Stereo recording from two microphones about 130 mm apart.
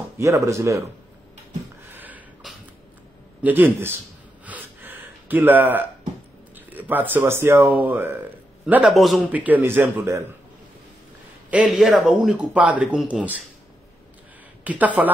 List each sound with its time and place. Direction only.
0.2 s speech: 25° right (ahead or behind)
1.9 s a sound: 15° right (ahead or behind)
2.4 s a sound: centre (ahead or behind)
3.4 s speech: 15° right (ahead or behind)
4.5 s gasp: 15° right (ahead or behind)
6.5 s a man's voice: 15° right (ahead or behind)
8.9 s speech: centre (ahead or behind)
9.3 s speech: 10° right (ahead or behind)
11.5 s speech: 5° right (ahead or behind)
14.6 s speech: 10° right (ahead or behind)